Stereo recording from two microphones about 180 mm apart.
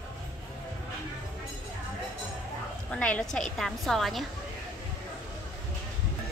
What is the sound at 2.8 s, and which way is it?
A woman's voice, 5° left (ahead or behind).